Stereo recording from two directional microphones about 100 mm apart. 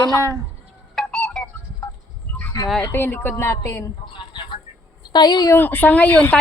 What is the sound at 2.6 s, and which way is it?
Speech, 35° left (ahead or behind).